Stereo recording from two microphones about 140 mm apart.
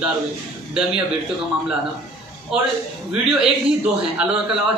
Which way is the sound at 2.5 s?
5° right (ahead or behind).